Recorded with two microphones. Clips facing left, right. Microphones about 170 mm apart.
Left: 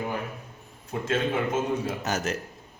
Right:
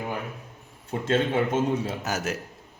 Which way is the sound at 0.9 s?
30° right (ahead or behind).